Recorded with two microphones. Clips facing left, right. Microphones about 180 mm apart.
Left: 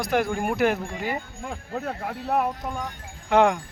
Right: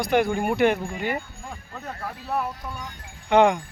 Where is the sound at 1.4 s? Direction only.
70° left (ahead or behind).